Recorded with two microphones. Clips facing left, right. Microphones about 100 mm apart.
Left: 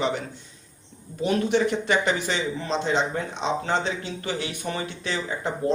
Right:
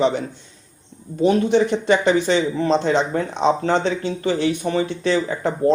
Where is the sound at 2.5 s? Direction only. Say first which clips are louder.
Right 7 dB; 45° right (ahead or behind).